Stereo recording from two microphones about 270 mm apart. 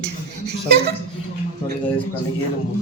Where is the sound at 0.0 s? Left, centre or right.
Right.